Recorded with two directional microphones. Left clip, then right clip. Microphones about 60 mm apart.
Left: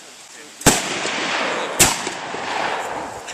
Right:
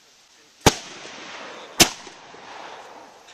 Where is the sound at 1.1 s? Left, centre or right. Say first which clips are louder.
Left 18 dB; left.